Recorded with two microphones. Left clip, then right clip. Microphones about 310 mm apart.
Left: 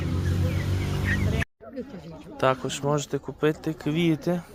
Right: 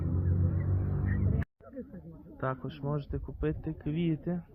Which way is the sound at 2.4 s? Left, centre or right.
Centre.